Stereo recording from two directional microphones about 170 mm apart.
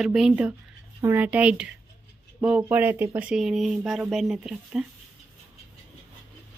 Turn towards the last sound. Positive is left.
turn(degrees=-5)  # may be behind; listen again after turning